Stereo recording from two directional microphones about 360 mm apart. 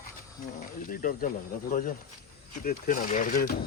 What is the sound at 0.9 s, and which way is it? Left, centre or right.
Speech, left.